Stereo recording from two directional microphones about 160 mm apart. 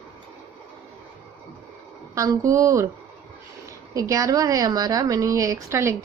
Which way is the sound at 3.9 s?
20° right (ahead or behind).